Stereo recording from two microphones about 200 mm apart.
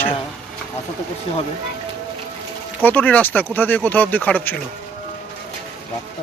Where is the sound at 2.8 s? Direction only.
10° left (ahead or behind).